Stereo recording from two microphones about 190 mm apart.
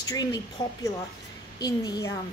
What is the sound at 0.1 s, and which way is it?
A woman's voice, 20° left (ahead or behind).